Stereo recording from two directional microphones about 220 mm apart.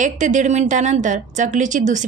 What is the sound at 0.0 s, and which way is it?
A woman's voice, 35° right (ahead or behind).